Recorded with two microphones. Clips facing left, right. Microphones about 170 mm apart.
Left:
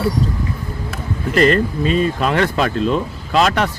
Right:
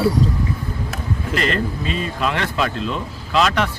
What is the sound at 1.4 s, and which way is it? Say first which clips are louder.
Speech: left 9 dB; 45° left (ahead or behind).